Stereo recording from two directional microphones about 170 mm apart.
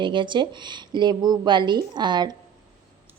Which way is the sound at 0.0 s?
30° right (ahead or behind).